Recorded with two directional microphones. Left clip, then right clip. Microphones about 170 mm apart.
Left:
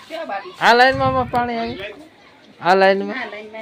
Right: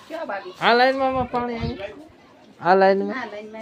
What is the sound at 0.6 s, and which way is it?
Speech, 5° left (ahead or behind).